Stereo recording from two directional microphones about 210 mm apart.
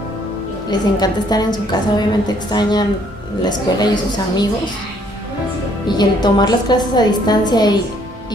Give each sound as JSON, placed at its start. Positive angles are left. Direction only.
{"t": 0.7, "sound": "a woman's voice", "side_deg": 20}
{"t": 5.9, "sound": "a woman's voice", "side_deg": 20}